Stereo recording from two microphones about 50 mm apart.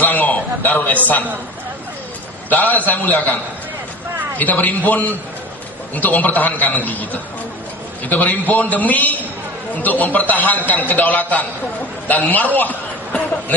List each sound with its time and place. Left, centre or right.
0.0 s a sound: left
0.7 s a man's voice: left
2.5 s a man's voice: left
4.4 s a man's voice: left